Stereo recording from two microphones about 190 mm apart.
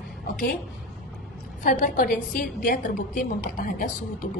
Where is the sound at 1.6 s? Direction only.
45° left (ahead or behind).